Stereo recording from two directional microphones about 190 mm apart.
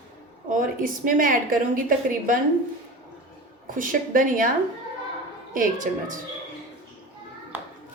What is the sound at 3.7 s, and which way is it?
Speech, 45° right (ahead or behind).